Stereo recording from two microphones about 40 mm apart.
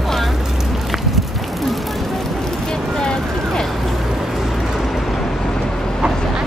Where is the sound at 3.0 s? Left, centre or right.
Centre.